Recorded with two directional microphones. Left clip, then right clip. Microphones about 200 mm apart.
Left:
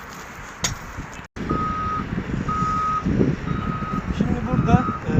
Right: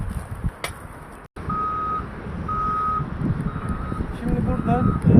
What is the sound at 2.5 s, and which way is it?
Reversing beeps, 55° right (ahead or behind).